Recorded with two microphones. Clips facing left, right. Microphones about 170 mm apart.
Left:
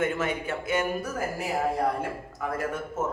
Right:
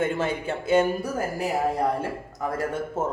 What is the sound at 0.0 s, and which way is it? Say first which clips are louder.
Speech: right 2 dB; 30° right (ahead or behind).